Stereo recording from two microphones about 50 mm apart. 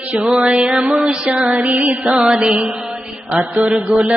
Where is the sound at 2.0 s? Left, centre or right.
Centre.